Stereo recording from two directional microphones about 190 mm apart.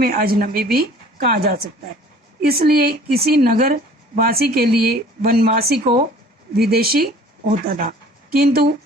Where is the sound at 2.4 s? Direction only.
55° right (ahead or behind).